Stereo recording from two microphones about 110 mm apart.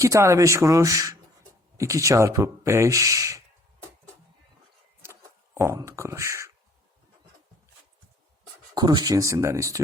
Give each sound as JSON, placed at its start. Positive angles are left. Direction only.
{"t": 0.0, "sound": "speech", "side_deg": -30}
{"t": 5.5, "sound": "speech", "side_deg": -25}
{"t": 8.7, "sound": "speech", "side_deg": -40}